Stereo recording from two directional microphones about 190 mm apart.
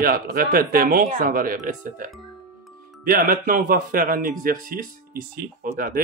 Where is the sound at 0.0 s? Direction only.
50° right (ahead or behind).